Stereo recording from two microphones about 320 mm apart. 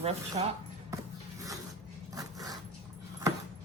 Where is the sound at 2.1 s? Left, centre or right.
Centre.